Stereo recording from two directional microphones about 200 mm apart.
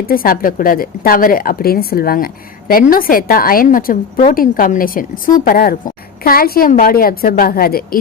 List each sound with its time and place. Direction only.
0.1 s a woman's voice: 45° left (ahead or behind)